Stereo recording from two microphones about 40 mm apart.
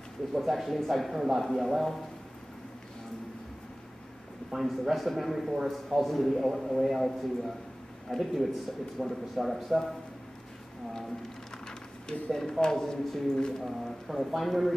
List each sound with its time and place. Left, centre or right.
0.5 s a man's voice: centre
4.5 s a man's voice: centre
11.6 s speech: centre
13.6 s a man's voice: centre